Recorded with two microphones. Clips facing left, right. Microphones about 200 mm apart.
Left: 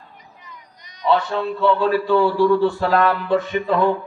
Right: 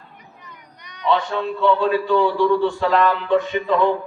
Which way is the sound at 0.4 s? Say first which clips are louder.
Right 1 dB; 65° right (ahead or behind).